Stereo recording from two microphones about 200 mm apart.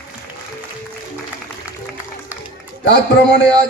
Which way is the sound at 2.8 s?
60° left (ahead or behind).